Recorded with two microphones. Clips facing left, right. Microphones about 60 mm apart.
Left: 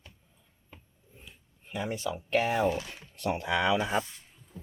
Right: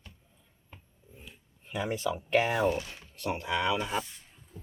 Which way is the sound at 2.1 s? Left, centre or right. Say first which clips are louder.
Right 1 dB; centre.